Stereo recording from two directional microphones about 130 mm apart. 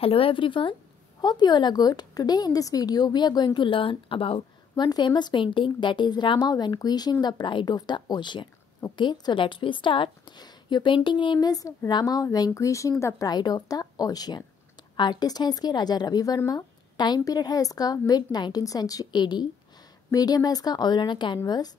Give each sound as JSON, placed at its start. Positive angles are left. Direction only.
{"t": 0.0, "sound": "a woman's voice", "side_deg": 45}
{"t": 4.8, "sound": "a woman's voice", "side_deg": 35}